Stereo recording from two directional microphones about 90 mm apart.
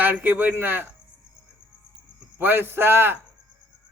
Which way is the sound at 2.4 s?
25° right (ahead or behind).